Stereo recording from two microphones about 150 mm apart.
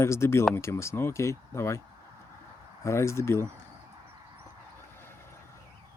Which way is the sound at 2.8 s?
20° left (ahead or behind).